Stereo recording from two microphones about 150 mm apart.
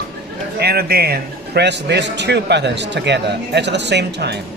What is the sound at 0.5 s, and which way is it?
Speech, 90° right.